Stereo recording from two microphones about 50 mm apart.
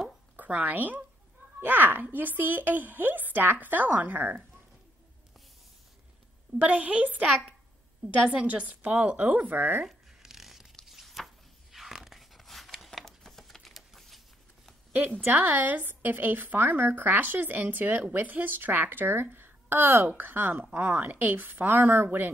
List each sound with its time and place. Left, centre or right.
0.4 s speech: right
6.6 s speech: right
8.3 s speech: right
9.8 s a sound: centre
13.0 s typing: centre
15.2 s speech: right